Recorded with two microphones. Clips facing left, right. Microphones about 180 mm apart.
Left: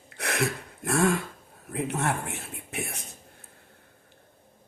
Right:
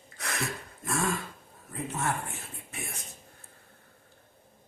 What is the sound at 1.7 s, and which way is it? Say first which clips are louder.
Speech: left 4 dB; 70° left (ahead or behind).